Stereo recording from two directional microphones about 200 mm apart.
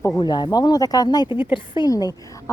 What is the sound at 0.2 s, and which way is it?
Speech, 20° left (ahead or behind).